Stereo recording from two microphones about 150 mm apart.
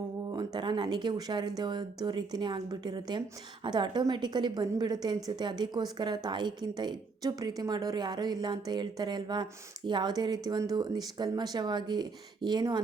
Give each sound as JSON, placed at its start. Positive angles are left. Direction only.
{"t": 0.3, "sound": "speech", "side_deg": -30}